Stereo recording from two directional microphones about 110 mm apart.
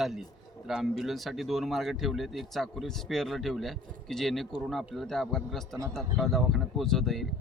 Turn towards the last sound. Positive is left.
turn(degrees=0)  # may be behind; listen again after turning